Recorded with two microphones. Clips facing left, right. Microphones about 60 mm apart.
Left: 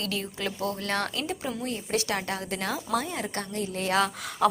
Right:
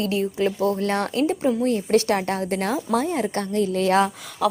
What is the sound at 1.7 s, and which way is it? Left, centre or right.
A woman's voice, right.